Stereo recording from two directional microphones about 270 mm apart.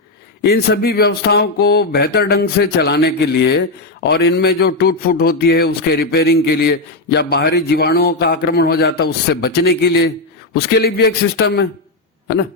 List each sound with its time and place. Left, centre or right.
0.4 s speech: left